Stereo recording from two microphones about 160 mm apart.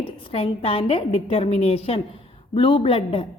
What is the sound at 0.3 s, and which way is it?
A woman's voice, 35° left (ahead or behind).